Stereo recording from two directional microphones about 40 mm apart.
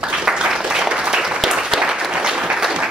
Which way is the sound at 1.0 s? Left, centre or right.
Centre.